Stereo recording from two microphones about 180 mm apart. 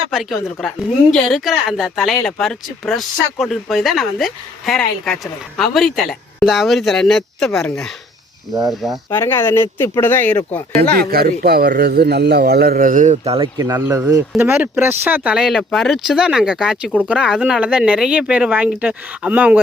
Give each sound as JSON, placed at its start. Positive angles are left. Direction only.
{"t": 0.1, "sound": "speech", "side_deg": 0}
{"t": 9.0, "sound": "speech", "side_deg": 15}
{"t": 11.1, "sound": "a man's voice", "side_deg": -60}
{"t": 13.6, "sound": "speech", "side_deg": -15}